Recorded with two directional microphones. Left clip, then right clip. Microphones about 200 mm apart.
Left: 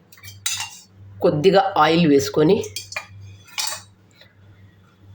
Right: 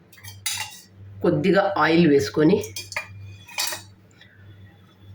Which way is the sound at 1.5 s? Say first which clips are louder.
Left 4 dB; 50° left (ahead or behind).